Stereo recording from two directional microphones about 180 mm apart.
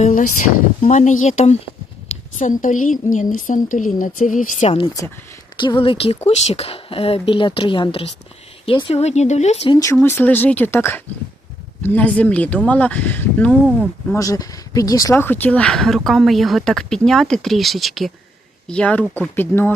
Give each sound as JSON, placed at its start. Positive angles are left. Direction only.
{"t": 0.0, "sound": "a woman's voice", "side_deg": 45}
{"t": 5.5, "sound": "speech", "side_deg": 25}
{"t": 9.7, "sound": "speech", "side_deg": 15}